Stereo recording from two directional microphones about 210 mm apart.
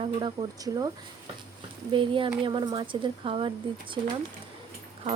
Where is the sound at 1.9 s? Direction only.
25° right (ahead or behind).